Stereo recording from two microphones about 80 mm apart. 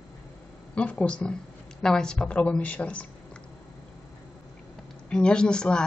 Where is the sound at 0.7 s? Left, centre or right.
Centre.